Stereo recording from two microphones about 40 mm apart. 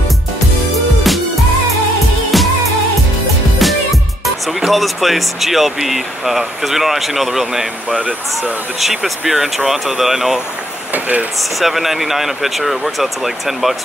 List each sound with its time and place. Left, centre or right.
2.3 s music: centre
3.5 s music: centre
4.5 s speech: centre
10.9 s speech: right
11.6 s speech: centre